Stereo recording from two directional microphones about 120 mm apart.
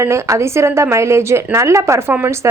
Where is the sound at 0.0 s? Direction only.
25° right (ahead or behind).